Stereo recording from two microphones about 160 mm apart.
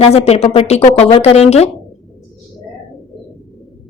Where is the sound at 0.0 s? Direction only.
40° left (ahead or behind).